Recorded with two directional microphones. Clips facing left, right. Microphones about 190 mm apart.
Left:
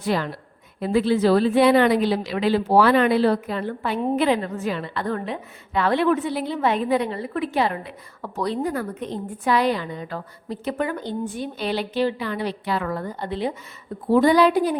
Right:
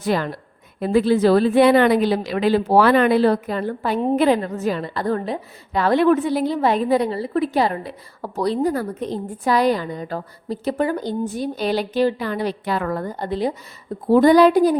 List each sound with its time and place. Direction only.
0.0 s a woman's voice: 45° right (ahead or behind)